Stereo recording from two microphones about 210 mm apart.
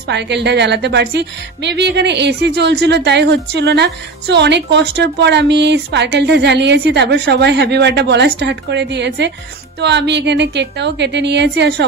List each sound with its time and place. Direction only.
0.1 s a woman's voice: 55° right (ahead or behind)